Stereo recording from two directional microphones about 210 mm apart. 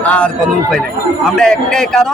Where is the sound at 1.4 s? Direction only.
Centre (ahead or behind).